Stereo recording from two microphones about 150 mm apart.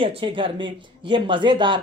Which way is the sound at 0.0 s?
35° right (ahead or behind).